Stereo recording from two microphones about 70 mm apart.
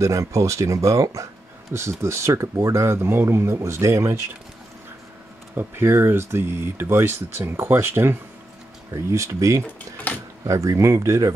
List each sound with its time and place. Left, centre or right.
0.0 s speech: right
5.6 s speech: right
8.9 s speech: right
9.7 s speech: left
10.4 s speech: right